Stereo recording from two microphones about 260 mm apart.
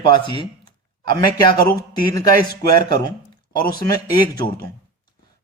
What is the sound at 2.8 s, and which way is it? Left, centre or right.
Speech, centre.